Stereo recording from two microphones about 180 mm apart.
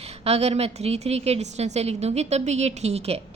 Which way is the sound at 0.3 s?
35° right (ahead or behind).